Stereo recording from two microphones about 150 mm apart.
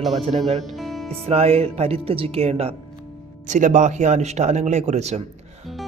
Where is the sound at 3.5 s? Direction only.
55° right (ahead or behind).